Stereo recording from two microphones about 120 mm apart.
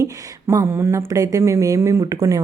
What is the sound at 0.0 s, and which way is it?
A woman's voice, 25° right (ahead or behind).